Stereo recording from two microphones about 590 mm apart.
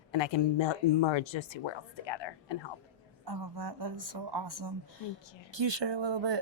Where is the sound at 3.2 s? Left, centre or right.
Right.